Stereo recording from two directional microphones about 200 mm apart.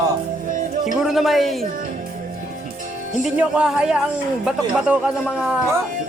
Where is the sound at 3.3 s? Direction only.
5° right (ahead or behind).